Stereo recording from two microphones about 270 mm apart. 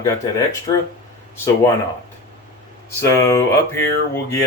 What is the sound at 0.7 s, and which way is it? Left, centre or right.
Speech, centre.